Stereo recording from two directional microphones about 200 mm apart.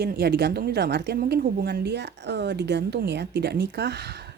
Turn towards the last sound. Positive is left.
turn(degrees=-55)  # may be behind; listen again after turning